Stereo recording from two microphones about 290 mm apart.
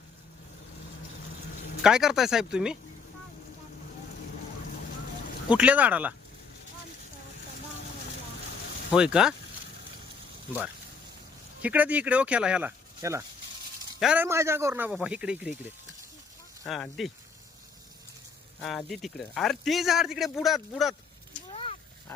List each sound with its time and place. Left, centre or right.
1.8 s a man's voice: centre
5.5 s a man's voice: centre
8.9 s a man's voice: centre
11.6 s a man's voice: centre
16.6 s a man's voice: centre
18.6 s a man's voice: centre
21.5 s a sound: left